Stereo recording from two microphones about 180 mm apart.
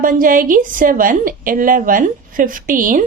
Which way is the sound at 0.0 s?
50° right (ahead or behind).